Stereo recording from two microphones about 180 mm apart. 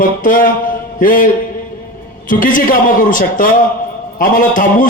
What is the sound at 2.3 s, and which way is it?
A man's voice, 50° left (ahead or behind).